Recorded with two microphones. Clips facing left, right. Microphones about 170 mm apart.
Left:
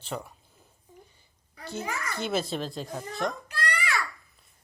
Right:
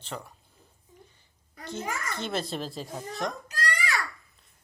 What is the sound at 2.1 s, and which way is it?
Speech, 5° left (ahead or behind).